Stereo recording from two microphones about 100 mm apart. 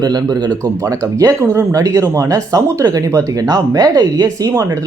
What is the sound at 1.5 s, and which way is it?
Speech, 35° right (ahead or behind).